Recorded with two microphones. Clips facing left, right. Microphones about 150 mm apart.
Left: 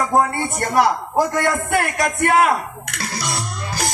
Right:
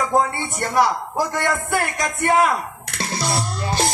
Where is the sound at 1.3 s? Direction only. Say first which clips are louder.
Left 3 dB; 60° left (ahead or behind).